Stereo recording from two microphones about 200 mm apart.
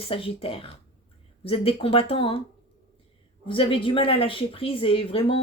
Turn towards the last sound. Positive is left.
turn(degrees=25)  # may be behind; listen again after turning